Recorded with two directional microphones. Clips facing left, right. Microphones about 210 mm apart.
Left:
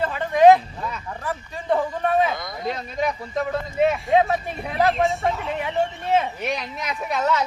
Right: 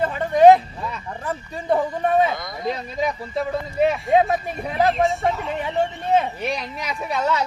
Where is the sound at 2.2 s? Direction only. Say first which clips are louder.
Right 2 dB; centre (ahead or behind).